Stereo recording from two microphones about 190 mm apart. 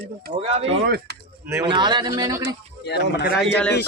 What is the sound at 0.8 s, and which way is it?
Speech, 60° right (ahead or behind).